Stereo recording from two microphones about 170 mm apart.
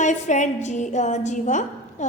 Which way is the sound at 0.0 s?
45° left (ahead or behind).